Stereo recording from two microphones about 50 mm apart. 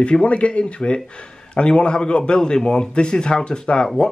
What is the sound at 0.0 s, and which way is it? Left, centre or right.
Speech, left.